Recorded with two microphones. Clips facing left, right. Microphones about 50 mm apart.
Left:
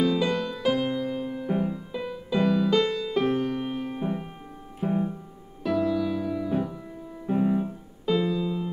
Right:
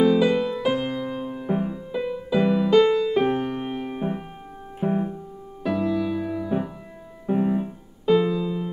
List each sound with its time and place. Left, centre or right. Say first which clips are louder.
0.0 s music: right 6 dB; centre
7.2 s piano: right 2 dB; centre